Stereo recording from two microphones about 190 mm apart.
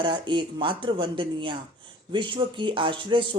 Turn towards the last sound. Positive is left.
turn(degrees=-25)  # may be behind; listen again after turning